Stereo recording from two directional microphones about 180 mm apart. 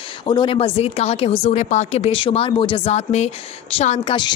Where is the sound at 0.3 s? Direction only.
25° left (ahead or behind).